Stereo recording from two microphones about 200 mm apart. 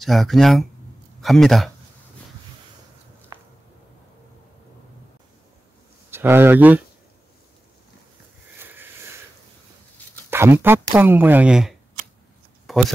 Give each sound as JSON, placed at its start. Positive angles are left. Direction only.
{"t": 0.0, "sound": "speech", "side_deg": 0}
{"t": 6.0, "sound": "speech", "side_deg": -10}
{"t": 8.5, "sound": "sniff", "side_deg": -10}
{"t": 10.3, "sound": "speech", "side_deg": -10}
{"t": 12.7, "sound": "a sound", "side_deg": 0}